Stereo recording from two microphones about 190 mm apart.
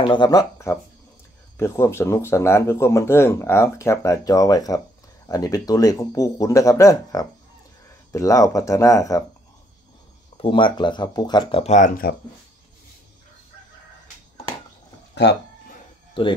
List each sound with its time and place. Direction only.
0.0 s speech: 25° left (ahead or behind)
10.3 s speech: 25° left (ahead or behind); by 12.2 s 50° left (ahead or behind)
15.2 s speech: 65° left (ahead or behind)
16.2 s speech: 30° left (ahead or behind)